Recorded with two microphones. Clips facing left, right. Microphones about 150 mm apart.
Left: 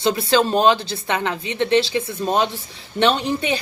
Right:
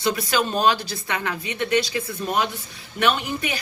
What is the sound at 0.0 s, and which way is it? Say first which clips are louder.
A woman's voice: left 5 dB; 30° left (ahead or behind).